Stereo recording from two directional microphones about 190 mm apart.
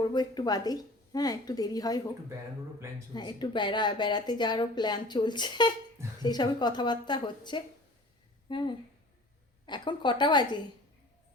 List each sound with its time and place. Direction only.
0.1 s speech: 20° left (ahead or behind)
3.2 s speech: 25° left (ahead or behind)